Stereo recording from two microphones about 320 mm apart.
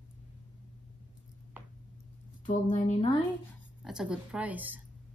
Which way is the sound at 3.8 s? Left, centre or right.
Centre.